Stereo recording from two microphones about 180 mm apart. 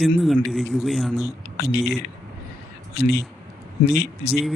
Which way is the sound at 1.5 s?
65° left (ahead or behind).